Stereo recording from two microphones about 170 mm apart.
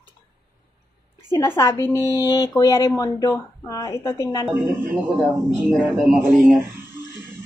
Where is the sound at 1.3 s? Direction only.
15° left (ahead or behind).